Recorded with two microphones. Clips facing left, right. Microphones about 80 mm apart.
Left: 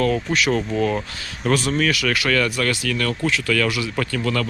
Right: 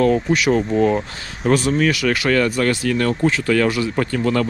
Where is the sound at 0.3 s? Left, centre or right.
Centre.